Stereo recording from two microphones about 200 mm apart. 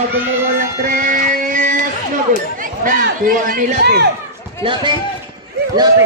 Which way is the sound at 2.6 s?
40° right (ahead or behind).